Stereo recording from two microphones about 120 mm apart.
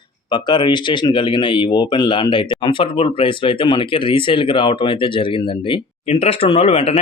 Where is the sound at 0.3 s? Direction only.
40° left (ahead or behind).